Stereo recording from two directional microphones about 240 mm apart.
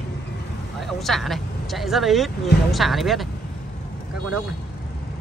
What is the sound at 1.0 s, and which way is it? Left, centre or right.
Speech, centre.